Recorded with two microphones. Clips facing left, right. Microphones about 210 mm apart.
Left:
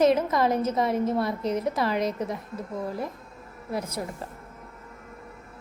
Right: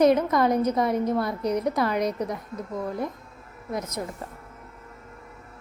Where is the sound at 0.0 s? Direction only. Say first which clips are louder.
Right 2 dB; 25° left (ahead or behind).